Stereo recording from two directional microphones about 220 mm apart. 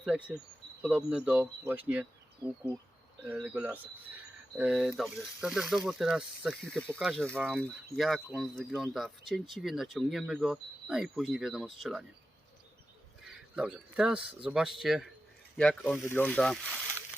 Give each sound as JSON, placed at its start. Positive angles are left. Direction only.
{"t": 0.0, "sound": "speech", "side_deg": -5}
{"t": 13.2, "sound": "speech", "side_deg": -5}